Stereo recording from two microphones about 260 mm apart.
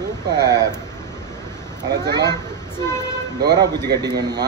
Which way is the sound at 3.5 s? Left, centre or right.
Centre.